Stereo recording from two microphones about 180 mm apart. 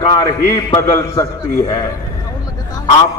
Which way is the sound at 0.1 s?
25° left (ahead or behind).